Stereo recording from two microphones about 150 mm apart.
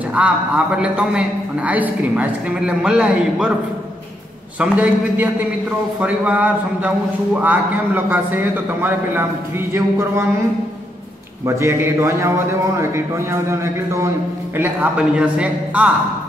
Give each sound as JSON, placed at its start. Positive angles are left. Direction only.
{"t": 0.2, "sound": "a man's voice", "side_deg": -10}
{"t": 4.6, "sound": "a man's voice", "side_deg": -10}
{"t": 11.4, "sound": "a man's voice", "side_deg": -20}